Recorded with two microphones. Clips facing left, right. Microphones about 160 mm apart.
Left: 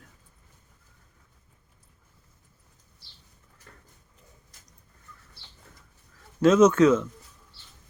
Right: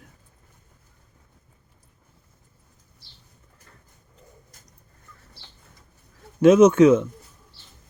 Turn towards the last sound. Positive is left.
turn(degrees=-20)  # may be behind; listen again after turning